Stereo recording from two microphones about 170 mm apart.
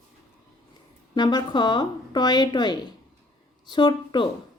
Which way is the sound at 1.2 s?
25° left (ahead or behind).